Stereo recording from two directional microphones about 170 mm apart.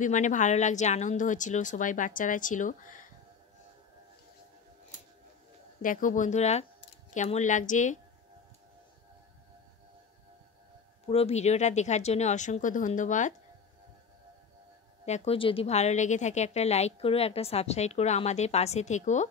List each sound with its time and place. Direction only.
0.0 s speech: 45° left (ahead or behind)
5.8 s speech: 50° left (ahead or behind)
11.1 s speech: 35° left (ahead or behind)
15.0 s a woman's voice: 40° left (ahead or behind)